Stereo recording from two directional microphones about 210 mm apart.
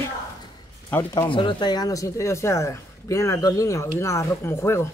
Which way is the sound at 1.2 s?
25° left (ahead or behind).